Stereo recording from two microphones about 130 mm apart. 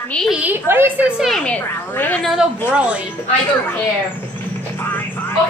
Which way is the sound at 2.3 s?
5° right (ahead or behind).